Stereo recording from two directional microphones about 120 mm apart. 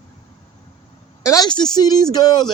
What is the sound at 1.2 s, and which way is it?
A man's voice, 30° left (ahead or behind).